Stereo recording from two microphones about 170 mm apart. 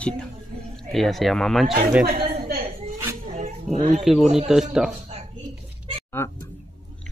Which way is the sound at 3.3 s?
45° right (ahead or behind).